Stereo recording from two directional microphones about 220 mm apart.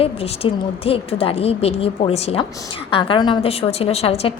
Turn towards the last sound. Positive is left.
turn(degrees=30)  # may be behind; listen again after turning